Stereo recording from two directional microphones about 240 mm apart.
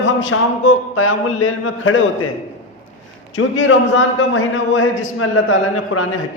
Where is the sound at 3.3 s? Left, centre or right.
Left.